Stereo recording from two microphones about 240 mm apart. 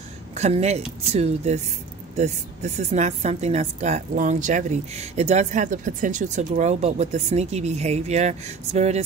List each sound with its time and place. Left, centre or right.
0.3 s a woman's voice: right